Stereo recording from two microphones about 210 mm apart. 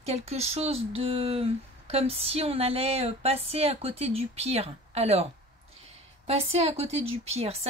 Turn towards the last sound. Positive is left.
turn(degrees=-30)  # may be behind; listen again after turning